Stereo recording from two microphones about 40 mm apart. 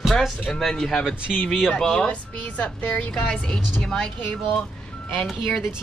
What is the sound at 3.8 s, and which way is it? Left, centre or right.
Speech, centre.